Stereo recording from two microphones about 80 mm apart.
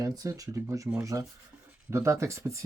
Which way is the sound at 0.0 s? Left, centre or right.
Right.